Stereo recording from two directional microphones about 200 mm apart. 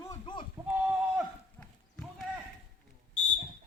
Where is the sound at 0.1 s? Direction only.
25° left (ahead or behind).